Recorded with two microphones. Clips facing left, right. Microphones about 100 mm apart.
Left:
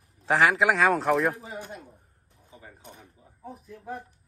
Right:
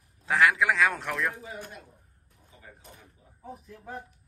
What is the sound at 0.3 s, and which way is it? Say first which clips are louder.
A man's voice: left 2 dB; 65° left (ahead or behind).